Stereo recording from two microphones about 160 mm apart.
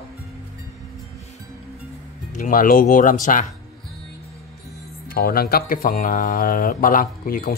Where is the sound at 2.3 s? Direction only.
55° left (ahead or behind).